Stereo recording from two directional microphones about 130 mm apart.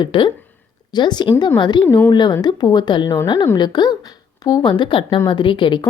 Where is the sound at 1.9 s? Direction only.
20° left (ahead or behind).